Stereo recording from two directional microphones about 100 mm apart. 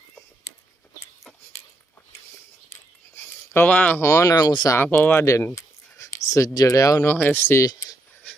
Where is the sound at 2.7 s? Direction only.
25° left (ahead or behind).